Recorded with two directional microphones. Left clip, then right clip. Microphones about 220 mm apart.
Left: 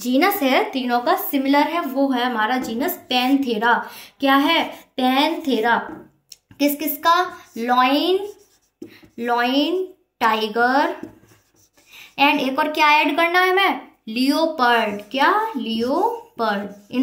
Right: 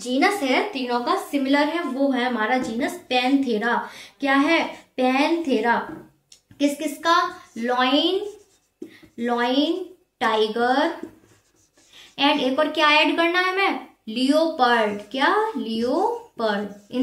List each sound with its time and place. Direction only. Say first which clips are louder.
0.0 s a woman's voice: left 3 dB; 60° left (ahead or behind)
9.1 s a woman's voice: left 3 dB; 45° left (ahead or behind)
12.2 s a woman's voice: left 2 dB; 45° left (ahead or behind)